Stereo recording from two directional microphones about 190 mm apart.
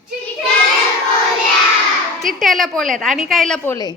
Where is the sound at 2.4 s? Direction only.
Centre (ahead or behind).